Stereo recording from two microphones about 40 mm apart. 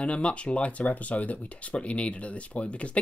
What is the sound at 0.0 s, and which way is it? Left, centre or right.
Speech, left.